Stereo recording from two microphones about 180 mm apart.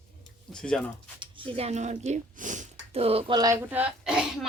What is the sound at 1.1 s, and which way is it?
Speech, 30° right (ahead or behind).